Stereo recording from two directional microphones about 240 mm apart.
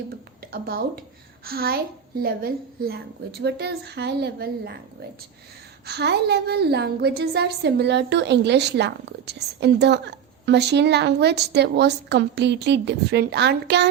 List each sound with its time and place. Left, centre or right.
0.5 s a woman's voice: right
5.8 s a woman's voice: right